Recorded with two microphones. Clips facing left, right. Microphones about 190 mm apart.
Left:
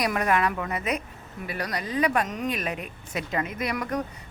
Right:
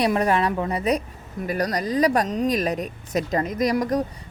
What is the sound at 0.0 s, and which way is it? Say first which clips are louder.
A woman's voice: right 4 dB; 30° right (ahead or behind).